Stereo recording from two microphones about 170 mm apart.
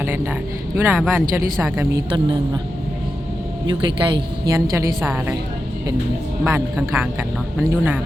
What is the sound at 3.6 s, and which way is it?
Speech, 30° right (ahead or behind).